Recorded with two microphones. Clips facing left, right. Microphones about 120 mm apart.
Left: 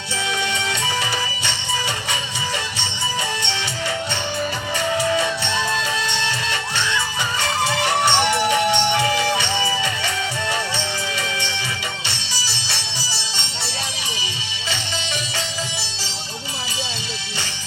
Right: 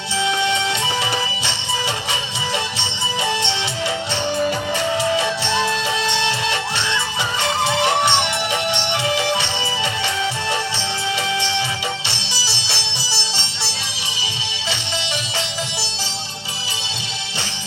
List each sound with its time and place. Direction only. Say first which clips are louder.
0.3 s music: right 4 dB; 25° right (ahead or behind)
5.1 s music: right 2 dB; 25° right (ahead or behind)
12.0 s music: right 2 dB; 25° right (ahead or behind)